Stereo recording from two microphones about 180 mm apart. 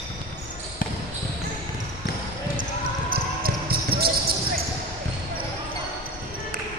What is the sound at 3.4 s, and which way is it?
Basketball bounce, 55° right (ahead or behind).